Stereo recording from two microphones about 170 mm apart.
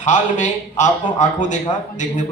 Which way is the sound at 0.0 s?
45° left (ahead or behind).